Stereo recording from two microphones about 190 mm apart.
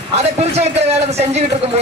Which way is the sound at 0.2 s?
35° right (ahead or behind).